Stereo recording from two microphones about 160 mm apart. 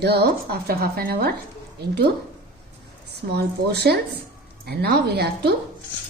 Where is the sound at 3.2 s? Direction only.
90° right.